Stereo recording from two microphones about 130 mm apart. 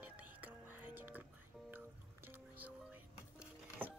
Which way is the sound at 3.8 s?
15° right (ahead or behind).